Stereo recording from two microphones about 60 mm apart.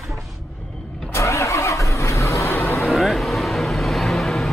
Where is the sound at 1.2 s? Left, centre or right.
Left.